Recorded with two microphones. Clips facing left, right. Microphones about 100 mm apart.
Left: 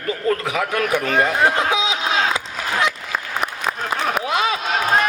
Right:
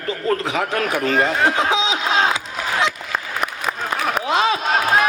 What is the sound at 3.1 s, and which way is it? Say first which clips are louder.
Applause: even; centre (ahead or behind).